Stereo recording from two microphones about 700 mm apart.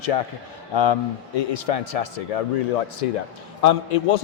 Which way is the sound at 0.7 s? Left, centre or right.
Left.